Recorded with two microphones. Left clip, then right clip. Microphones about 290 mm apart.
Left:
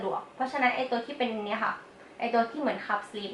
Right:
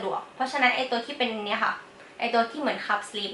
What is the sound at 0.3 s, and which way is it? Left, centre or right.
A woman's voice, centre.